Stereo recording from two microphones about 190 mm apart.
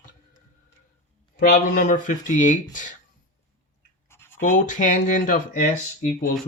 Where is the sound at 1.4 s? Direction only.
45° left (ahead or behind).